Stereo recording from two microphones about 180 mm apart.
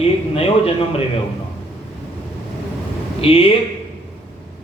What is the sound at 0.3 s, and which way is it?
Speech, 30° left (ahead or behind).